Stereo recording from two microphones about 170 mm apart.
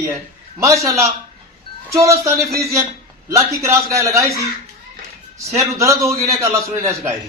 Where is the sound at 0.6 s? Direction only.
20° right (ahead or behind).